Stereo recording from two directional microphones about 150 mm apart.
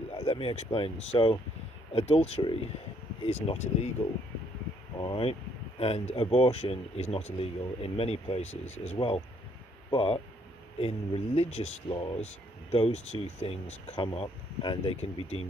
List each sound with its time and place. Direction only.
0.1 s speech: 35° left (ahead or behind)
4.9 s speech: 30° left (ahead or behind)
5.8 s speech: 40° left (ahead or behind)
11.9 s speech: 30° left (ahead or behind)
12.7 s speech: 45° left (ahead or behind)
15.0 s speech: 45° left (ahead or behind)